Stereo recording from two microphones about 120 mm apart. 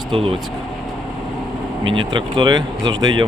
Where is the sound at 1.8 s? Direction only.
45° right (ahead or behind).